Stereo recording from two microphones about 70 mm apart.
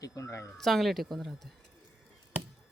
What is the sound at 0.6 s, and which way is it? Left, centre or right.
Speech, centre.